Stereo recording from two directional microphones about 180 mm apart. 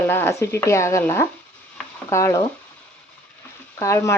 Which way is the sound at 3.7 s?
15° left (ahead or behind).